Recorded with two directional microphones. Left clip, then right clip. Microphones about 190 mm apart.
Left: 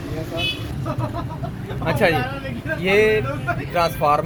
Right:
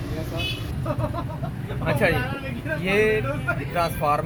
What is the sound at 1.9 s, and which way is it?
Speech, 70° left (ahead or behind).